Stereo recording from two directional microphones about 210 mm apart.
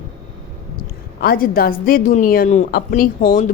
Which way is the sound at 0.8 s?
45° left (ahead or behind).